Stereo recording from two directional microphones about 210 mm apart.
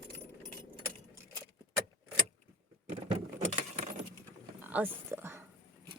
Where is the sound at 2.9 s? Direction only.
30° right (ahead or behind).